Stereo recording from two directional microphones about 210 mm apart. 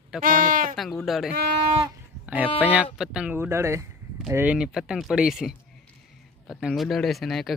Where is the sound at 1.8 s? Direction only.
5° right (ahead or behind).